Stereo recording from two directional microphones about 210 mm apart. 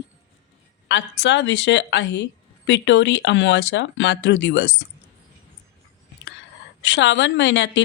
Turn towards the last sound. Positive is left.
turn(degrees=60)  # may be behind; listen again after turning